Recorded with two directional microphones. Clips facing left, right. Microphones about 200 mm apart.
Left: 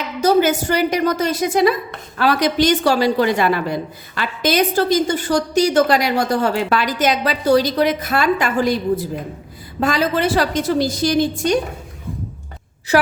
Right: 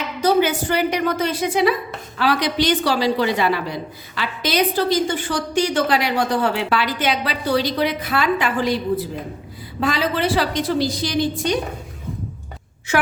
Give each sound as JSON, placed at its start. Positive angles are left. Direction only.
{"t": 0.2, "sound": "a woman's voice", "side_deg": 45}